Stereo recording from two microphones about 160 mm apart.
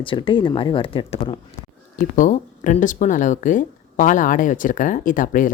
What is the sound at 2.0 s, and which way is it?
Speech, 50° left (ahead or behind).